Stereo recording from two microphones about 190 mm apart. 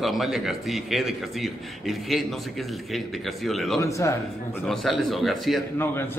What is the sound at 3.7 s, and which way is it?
Speech, 15° left (ahead or behind).